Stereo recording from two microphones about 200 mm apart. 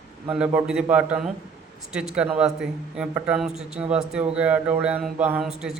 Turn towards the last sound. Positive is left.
turn(degrees=-5)  # may be behind; listen again after turning